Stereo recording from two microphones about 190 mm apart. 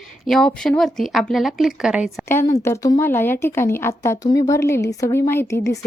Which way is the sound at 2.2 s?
15° left (ahead or behind).